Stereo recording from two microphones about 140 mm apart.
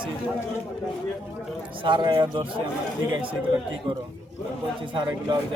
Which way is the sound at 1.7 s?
35° right (ahead or behind).